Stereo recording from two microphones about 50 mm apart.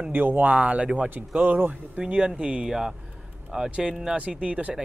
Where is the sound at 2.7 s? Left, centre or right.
Centre.